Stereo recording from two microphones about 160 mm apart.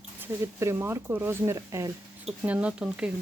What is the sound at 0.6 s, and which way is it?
Speech, 15° right (ahead or behind).